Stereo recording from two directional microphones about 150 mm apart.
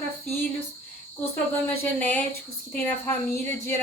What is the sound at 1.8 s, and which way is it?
Speech, 10° left (ahead or behind).